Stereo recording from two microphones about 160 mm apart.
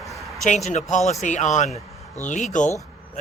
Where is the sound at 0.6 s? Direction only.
50° left (ahead or behind).